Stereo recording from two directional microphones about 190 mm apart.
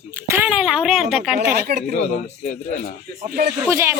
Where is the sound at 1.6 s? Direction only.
55° right (ahead or behind).